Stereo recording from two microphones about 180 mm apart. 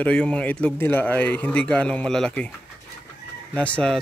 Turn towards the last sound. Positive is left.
turn(degrees=5)  # may be behind; listen again after turning